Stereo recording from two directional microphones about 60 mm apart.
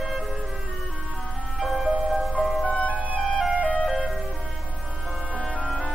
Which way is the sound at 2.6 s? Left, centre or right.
Left.